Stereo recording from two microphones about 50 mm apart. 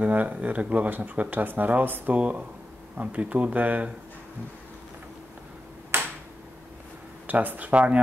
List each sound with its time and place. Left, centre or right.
0.0 s speech: right
2.1 s speech: right
5.9 s a sound: right
7.2 s speech: right